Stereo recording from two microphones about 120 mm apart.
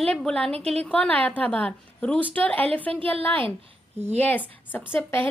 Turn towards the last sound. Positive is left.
turn(degrees=15)  # may be behind; listen again after turning